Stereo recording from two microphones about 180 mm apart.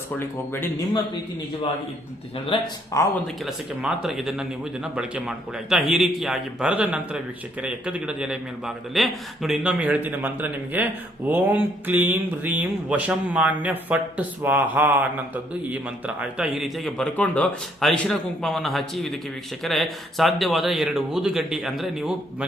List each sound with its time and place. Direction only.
2.5 s speech: 15° left (ahead or behind)
3.4 s a man's voice: centre (ahead or behind)